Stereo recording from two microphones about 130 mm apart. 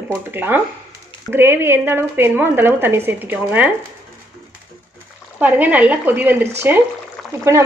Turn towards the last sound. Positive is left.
turn(degrees=-20)  # may be behind; listen again after turning